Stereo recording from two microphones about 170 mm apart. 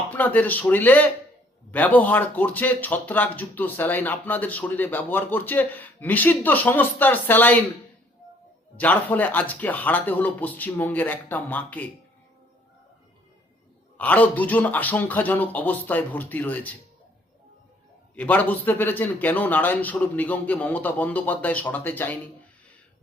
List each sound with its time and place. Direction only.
0.1 s speech: 10° left (ahead or behind)
8.7 s speech: 10° left (ahead or behind)
14.0 s speech: 10° left (ahead or behind)
18.1 s speech: 10° left (ahead or behind)